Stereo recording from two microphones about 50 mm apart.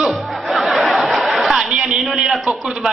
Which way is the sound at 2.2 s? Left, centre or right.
Centre.